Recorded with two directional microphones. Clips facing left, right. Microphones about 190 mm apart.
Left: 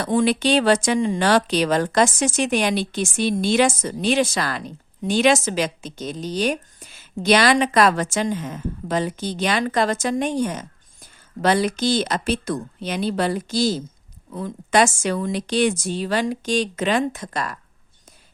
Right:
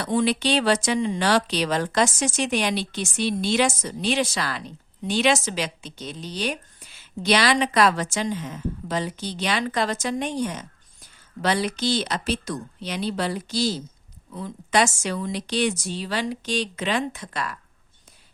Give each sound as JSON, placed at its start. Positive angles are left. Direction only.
{"t": 0.0, "sound": "speech", "side_deg": 50}